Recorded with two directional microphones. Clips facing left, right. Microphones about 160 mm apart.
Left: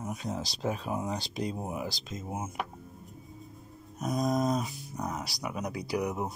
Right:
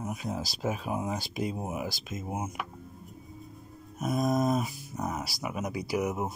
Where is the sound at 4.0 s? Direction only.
5° right (ahead or behind).